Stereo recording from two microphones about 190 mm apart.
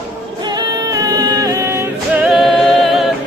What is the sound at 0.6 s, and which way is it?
Music, 20° right (ahead or behind).